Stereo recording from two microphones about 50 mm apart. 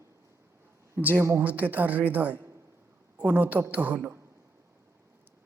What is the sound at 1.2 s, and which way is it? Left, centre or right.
Speech, right.